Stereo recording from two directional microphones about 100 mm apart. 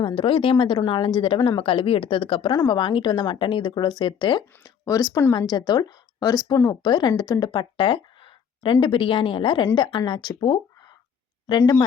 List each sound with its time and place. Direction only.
0.0 s speech: 60° left (ahead or behind)
2.5 s speech: 45° left (ahead or behind)
4.6 s speech: 35° left (ahead or behind)
5.3 s a woman's voice: 45° left (ahead or behind)